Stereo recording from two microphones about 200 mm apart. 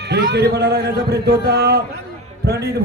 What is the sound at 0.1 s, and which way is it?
A man's voice, 55° right (ahead or behind).